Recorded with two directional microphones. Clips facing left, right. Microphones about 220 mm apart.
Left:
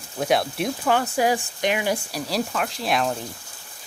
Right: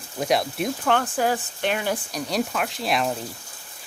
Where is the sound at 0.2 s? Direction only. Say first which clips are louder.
Left 1 dB; centre (ahead or behind).